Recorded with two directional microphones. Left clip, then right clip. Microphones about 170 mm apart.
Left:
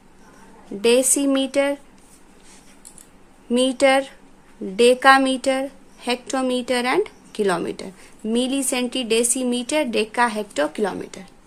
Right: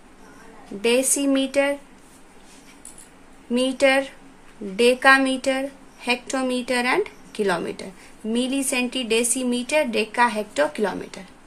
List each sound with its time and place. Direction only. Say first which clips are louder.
0.8 s speech: left 3 dB; 35° left (ahead or behind)
3.5 s speech: left 2 dB; 35° left (ahead or behind)